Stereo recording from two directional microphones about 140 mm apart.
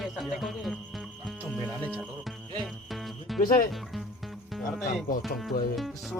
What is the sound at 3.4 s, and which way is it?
Speech, 85° left.